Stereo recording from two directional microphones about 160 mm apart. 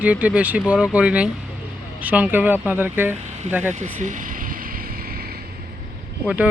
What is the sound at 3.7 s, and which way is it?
Speech, 50° right (ahead or behind).